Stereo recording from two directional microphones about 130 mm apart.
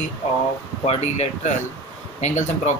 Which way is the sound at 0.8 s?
60° left (ahead or behind).